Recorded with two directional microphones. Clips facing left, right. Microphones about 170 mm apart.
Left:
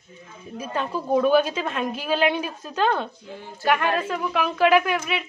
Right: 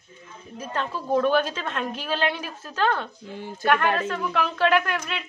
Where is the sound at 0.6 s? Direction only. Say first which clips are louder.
Left 2 dB; 10° left (ahead or behind).